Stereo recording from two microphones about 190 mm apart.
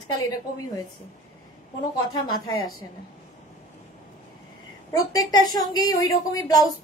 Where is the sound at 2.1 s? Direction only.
20° left (ahead or behind).